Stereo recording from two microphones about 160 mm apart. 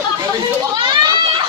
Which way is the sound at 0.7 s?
30° right (ahead or behind).